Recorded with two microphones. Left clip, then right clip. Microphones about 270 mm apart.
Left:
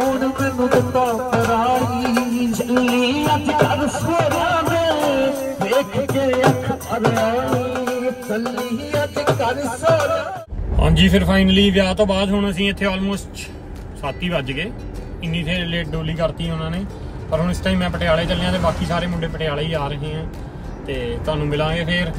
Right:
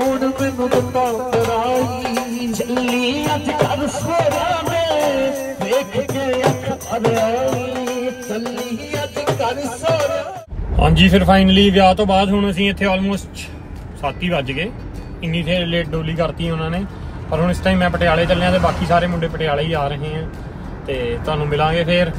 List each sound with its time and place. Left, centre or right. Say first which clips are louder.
0.0 s music: right 1 dB; right
9.2 s music: right 3 dB; right
10.8 s speech: right 3 dB; centre